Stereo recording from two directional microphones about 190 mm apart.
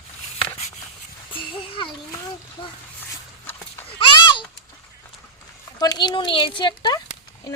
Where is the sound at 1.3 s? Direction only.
30° left (ahead or behind).